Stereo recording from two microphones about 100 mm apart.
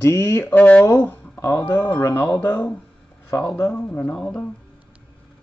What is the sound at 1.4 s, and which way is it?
Speech, 30° left (ahead or behind).